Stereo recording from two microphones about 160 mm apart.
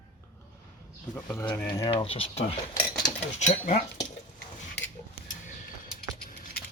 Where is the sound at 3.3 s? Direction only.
50° left (ahead or behind).